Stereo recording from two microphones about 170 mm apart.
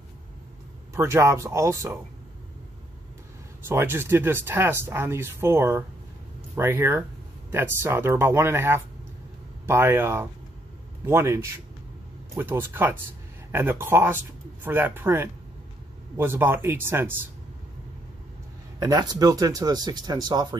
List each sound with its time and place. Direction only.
0.9 s speech: 15° right (ahead or behind)
3.6 s speech: 15° right (ahead or behind)
18.8 s speech: 25° right (ahead or behind)